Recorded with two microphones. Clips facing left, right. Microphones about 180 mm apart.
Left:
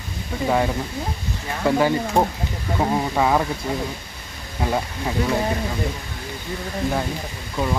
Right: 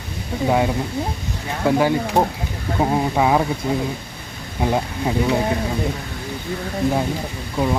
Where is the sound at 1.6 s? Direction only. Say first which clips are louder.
Right 1 dB; 10° right (ahead or behind).